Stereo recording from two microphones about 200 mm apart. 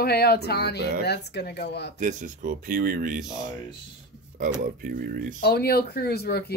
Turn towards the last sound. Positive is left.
turn(degrees=55)  # may be behind; listen again after turning